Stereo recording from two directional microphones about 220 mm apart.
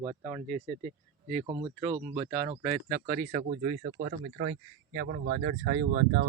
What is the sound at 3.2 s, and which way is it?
Speech, 40° right (ahead or behind).